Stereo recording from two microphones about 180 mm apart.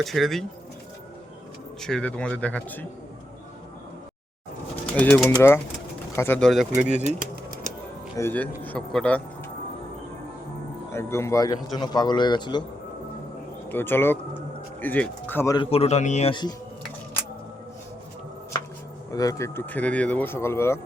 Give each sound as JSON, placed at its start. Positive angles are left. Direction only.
{"t": 0.0, "sound": "speech", "side_deg": 0}
{"t": 1.8, "sound": "speech", "side_deg": 5}
{"t": 4.9, "sound": "speech", "side_deg": 10}
{"t": 6.5, "sound": "speech", "side_deg": 0}
{"t": 6.8, "sound": "pigeon", "side_deg": -40}
{"t": 8.1, "sound": "speech", "side_deg": 10}
{"t": 10.9, "sound": "a man's voice", "side_deg": 15}
{"t": 13.7, "sound": "speech", "side_deg": 10}
{"t": 15.5, "sound": "a man's voice", "side_deg": 30}
{"t": 16.3, "sound": "a man's voice", "side_deg": 25}
{"t": 19.1, "sound": "speech", "side_deg": 20}